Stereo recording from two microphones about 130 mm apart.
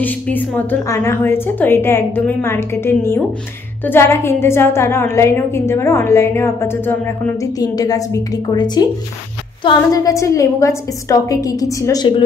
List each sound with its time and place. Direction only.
0.0 s a woman's voice: 15° left (ahead or behind)
7.5 s a woman's voice: 30° left (ahead or behind)